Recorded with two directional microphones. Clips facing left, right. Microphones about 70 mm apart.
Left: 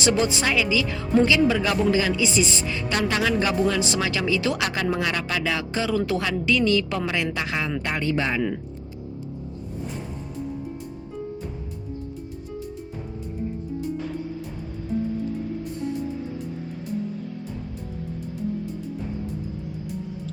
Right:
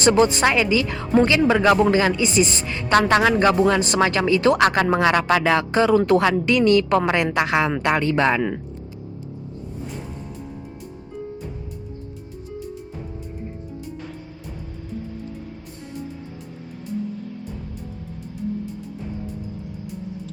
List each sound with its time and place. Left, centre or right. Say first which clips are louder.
0.0 s a woman's voice: right 6 dB; right